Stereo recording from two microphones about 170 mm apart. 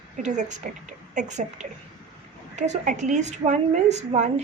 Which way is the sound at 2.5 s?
45° right (ahead or behind).